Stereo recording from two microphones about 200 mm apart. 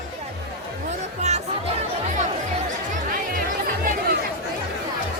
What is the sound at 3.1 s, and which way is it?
Music, 45° right (ahead or behind).